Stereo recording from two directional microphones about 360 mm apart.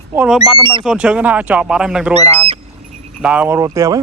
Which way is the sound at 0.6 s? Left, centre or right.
Centre.